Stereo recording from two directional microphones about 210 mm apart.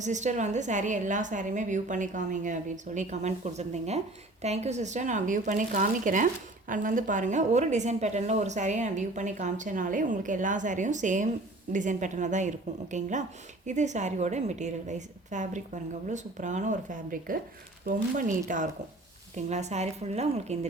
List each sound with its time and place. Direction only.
0.0 s a woman's voice: 35° right (ahead or behind)